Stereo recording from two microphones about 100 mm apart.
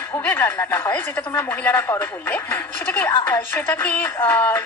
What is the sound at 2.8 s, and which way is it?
A woman's voice, 20° left (ahead or behind).